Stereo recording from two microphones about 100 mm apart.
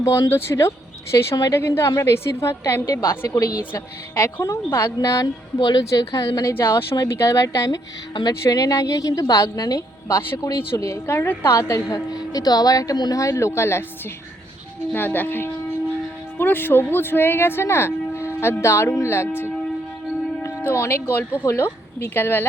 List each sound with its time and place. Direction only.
0.0 s speech: 30° left (ahead or behind)
1.1 s speech: 40° left (ahead or behind)
1.5 s speech: 25° left (ahead or behind); by 5.8 s 45° left (ahead or behind)
5.9 s speech: 35° left (ahead or behind)
6.5 s speech: 25° left (ahead or behind)
11.0 s speech: 20° left (ahead or behind)
11.9 s speech: 40° left (ahead or behind)
14.9 s speech: 20° left (ahead or behind)
20.7 s speech: 25° left (ahead or behind)